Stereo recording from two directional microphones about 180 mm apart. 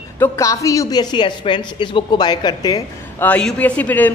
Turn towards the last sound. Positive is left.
turn(degrees=10)  # may be behind; listen again after turning